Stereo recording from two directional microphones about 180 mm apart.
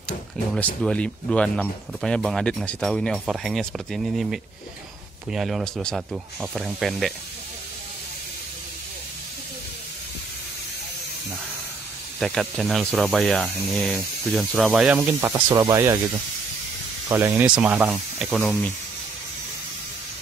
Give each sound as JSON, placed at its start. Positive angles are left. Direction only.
{"t": 0.8, "sound": "speech", "side_deg": 5}
{"t": 12.2, "sound": "speech", "side_deg": 0}
{"t": 15.1, "sound": "speech", "side_deg": -15}
{"t": 17.1, "sound": "speech", "side_deg": -15}